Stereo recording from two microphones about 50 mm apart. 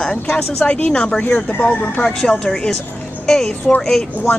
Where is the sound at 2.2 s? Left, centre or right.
Centre.